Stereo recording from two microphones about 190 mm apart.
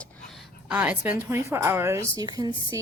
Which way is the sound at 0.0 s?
Centre (ahead or behind).